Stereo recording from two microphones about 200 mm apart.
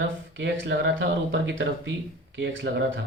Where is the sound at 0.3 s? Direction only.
70° right (ahead or behind).